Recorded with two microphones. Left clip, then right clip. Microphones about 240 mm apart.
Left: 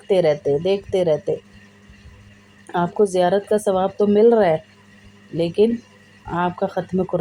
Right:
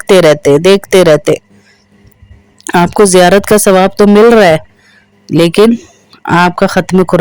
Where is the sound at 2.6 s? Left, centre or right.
Right.